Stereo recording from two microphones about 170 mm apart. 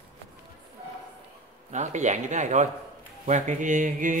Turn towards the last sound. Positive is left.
turn(degrees=-50)  # may be behind; listen again after turning